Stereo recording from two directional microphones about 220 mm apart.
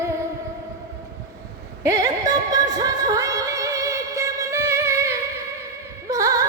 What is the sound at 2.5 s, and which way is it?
Music, 15° right (ahead or behind).